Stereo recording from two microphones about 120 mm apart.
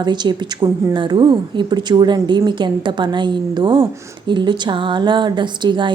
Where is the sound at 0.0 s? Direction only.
35° right (ahead or behind).